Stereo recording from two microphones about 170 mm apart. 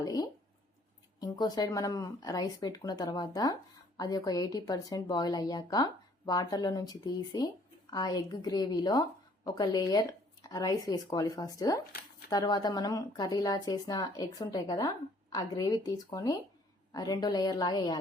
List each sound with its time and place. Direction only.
0.0 s a woman's voice: 20° left (ahead or behind)